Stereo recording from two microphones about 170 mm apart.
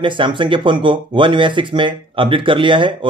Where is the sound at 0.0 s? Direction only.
30° right (ahead or behind).